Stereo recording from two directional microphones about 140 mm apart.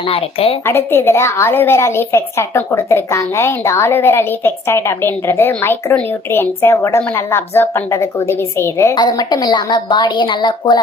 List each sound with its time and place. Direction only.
0.1 s a woman's voice: 45° left (ahead or behind)
0.6 s a woman's voice: 15° left (ahead or behind)
9.0 s a woman's voice: 30° left (ahead or behind)